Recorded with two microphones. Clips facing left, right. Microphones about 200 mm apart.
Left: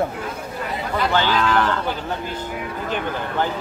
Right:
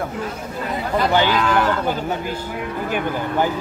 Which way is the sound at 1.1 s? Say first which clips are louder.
Right 1 dB; 15° right (ahead or behind).